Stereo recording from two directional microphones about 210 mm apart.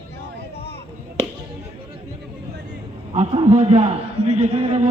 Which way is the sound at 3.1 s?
30° right (ahead or behind).